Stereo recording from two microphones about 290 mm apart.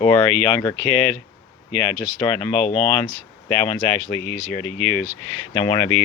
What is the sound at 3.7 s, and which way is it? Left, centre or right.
Speech, centre.